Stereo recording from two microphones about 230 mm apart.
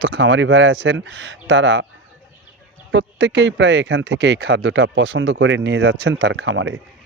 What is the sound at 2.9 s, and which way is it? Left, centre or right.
A man's voice, right.